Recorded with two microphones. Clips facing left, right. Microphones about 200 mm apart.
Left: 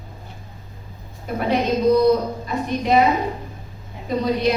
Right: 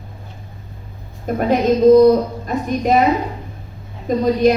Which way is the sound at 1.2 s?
45° right (ahead or behind).